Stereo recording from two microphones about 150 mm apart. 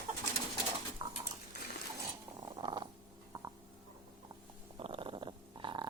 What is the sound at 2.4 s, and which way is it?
Purr, 30° right (ahead or behind).